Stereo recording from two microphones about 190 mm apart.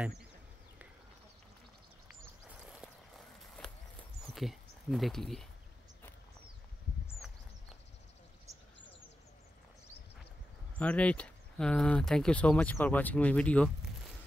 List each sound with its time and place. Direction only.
2.6 s walk: centre (ahead or behind)
4.3 s speech: centre (ahead or behind)
10.8 s speech: 5° left (ahead or behind)